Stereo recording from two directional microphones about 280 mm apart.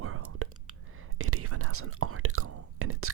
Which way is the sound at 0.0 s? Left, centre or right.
Right.